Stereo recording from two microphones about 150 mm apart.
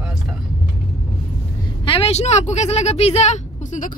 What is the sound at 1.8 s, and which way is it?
Speech, 35° left (ahead or behind).